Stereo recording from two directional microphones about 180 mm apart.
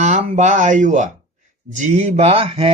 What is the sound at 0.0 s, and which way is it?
Speech, 40° right (ahead or behind).